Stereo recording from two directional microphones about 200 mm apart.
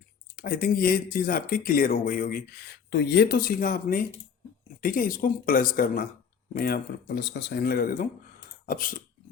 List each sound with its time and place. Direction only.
0.3 s speech: 45° left (ahead or behind)